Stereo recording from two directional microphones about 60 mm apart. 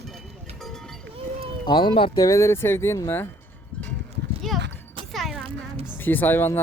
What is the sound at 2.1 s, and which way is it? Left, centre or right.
Speech, left.